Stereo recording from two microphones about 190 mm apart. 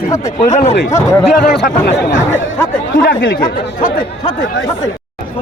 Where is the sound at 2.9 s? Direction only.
45° left (ahead or behind).